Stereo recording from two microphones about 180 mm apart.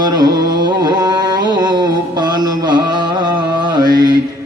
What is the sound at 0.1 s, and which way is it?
Carnatic music, 20° right (ahead or behind).